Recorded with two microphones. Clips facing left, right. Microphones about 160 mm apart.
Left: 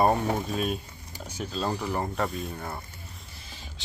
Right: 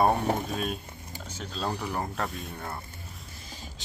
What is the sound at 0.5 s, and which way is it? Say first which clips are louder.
Speech: left 3 dB; centre (ahead or behind).